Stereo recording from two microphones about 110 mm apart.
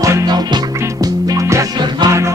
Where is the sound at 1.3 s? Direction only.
30° right (ahead or behind).